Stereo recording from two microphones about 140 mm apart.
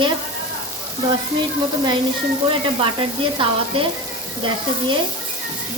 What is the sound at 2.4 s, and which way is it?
Sizzle, 40° right (ahead or behind).